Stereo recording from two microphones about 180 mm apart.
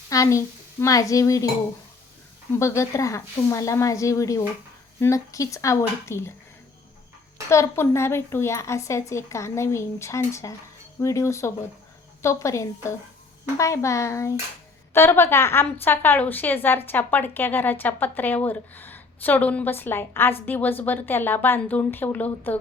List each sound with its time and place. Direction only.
0.1 s speech: 15° left (ahead or behind)
2.6 s a woman's voice: 15° left (ahead or behind)
7.5 s a woman's voice: 15° left (ahead or behind)